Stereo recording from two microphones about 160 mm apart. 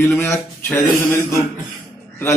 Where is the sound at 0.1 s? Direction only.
15° left (ahead or behind).